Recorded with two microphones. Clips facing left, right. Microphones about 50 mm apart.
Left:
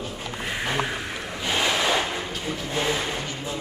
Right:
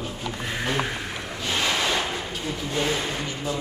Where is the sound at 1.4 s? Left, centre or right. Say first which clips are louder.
Left 1 dB; centre.